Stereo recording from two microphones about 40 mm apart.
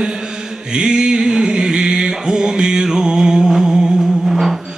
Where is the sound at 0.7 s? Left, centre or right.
Centre.